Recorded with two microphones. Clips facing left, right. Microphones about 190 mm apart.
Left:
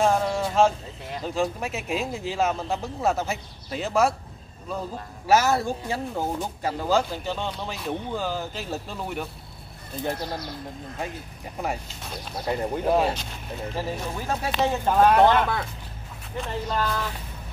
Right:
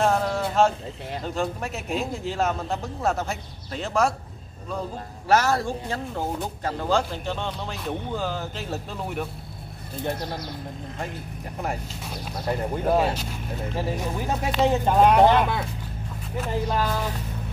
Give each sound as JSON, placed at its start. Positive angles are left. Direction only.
{"t": 0.0, "sound": "a sound", "side_deg": 0}
{"t": 1.2, "sound": "speech", "side_deg": 0}
{"t": 5.3, "sound": "speech", "side_deg": 5}
{"t": 12.3, "sound": "speech", "side_deg": 0}
{"t": 13.9, "sound": "speech", "side_deg": -15}